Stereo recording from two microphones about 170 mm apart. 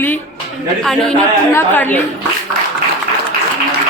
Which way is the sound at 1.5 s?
10° left (ahead or behind).